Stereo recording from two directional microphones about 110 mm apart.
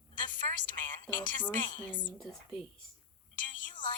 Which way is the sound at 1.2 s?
45° left (ahead or behind).